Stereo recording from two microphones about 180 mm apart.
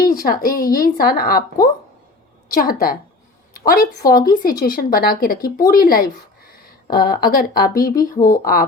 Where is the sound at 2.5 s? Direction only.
50° left (ahead or behind).